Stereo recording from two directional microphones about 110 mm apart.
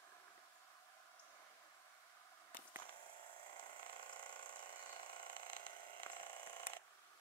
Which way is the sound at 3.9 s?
45° left (ahead or behind).